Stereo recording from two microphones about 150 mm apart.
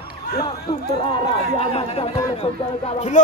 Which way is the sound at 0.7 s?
35° left (ahead or behind).